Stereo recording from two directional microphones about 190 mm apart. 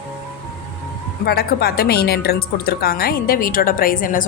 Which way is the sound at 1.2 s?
55° left (ahead or behind).